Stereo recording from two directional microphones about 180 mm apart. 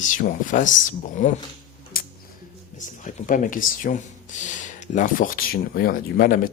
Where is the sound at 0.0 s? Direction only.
45° left (ahead or behind).